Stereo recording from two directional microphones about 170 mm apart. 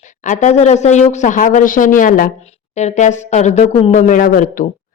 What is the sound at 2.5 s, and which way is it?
Speech, 40° left (ahead or behind).